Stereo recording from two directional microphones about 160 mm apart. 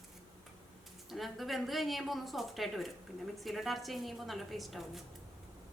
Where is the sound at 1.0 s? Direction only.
Centre (ahead or behind).